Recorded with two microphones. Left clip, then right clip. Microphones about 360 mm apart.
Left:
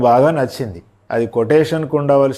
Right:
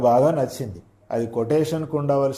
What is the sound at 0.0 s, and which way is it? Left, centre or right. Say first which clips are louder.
A man's voice: left 5 dB; left.